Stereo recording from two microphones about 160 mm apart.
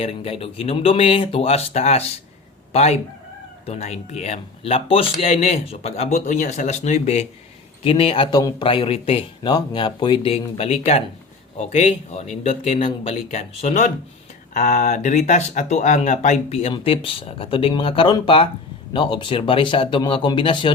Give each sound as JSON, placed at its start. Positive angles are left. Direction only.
{"t": 0.0, "sound": "speech", "side_deg": 35}
{"t": 8.6, "sound": "speech", "side_deg": 35}